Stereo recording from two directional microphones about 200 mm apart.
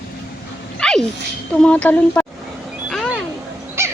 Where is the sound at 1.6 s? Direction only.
5° left (ahead or behind).